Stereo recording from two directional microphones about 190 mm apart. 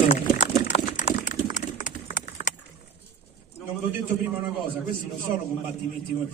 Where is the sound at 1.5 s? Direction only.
40° left (ahead or behind).